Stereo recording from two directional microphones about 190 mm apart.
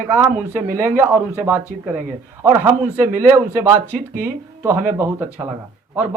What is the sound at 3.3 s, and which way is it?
Speech, 15° right (ahead or behind).